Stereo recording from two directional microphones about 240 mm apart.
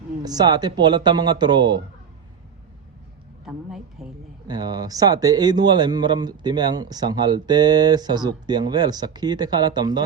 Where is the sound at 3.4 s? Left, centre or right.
Centre.